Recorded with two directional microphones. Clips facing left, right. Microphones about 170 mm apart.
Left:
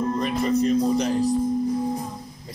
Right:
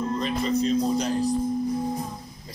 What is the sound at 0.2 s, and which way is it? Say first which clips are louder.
Speech: left 2 dB; 55° left (ahead or behind).